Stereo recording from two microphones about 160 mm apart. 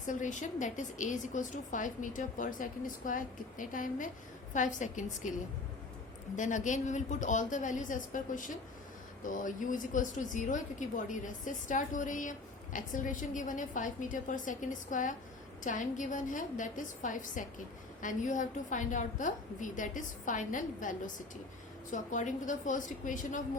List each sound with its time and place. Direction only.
0.1 s speech: 50° left (ahead or behind)
6.3 s speech: 50° left (ahead or behind)
21.9 s speech: 50° left (ahead or behind)